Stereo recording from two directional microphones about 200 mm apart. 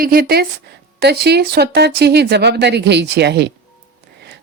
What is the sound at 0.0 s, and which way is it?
A woman's voice, 45° right (ahead or behind).